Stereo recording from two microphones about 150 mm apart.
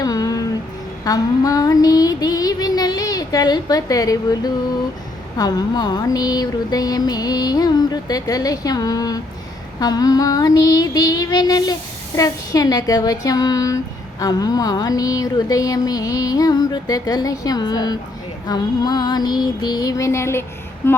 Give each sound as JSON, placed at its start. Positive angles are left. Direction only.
{"t": 0.0, "sound": "a sound", "side_deg": 25}
{"t": 1.0, "sound": "child singing", "side_deg": 25}
{"t": 20.8, "sound": "speech", "side_deg": 15}